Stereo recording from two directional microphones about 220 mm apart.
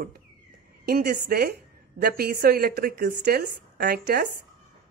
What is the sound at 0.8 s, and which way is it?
A woman's voice, 45° right (ahead or behind).